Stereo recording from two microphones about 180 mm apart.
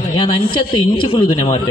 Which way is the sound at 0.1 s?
25° left (ahead or behind).